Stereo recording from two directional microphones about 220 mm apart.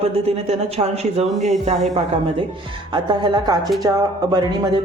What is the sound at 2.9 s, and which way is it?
Speech, 20° right (ahead or behind).